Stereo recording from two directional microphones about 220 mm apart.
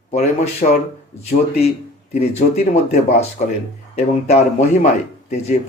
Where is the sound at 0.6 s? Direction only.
35° left (ahead or behind).